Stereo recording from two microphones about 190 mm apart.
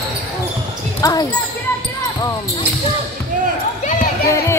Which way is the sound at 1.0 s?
20° left (ahead or behind).